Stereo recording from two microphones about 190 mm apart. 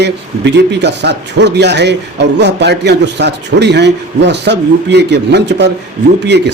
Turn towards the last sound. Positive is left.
turn(degrees=-60)  # may be behind; listen again after turning